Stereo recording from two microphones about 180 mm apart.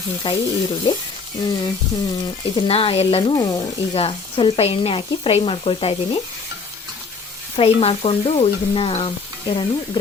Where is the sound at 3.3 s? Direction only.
20° left (ahead or behind).